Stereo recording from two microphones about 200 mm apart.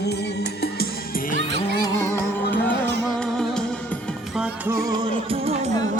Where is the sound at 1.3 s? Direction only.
60° right (ahead or behind).